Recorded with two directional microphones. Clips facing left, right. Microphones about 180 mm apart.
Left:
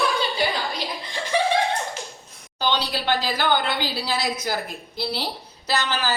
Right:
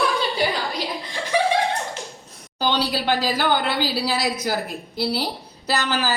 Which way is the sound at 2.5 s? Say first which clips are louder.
Right 2 dB; 10° right (ahead or behind).